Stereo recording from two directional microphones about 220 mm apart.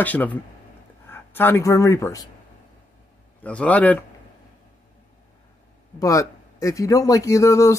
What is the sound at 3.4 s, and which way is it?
Speech, 5° left (ahead or behind).